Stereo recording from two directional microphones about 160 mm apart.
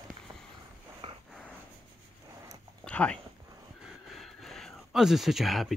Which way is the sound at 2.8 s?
5° left (ahead or behind).